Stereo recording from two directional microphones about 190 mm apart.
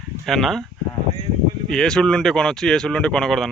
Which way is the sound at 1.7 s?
5° left (ahead or behind).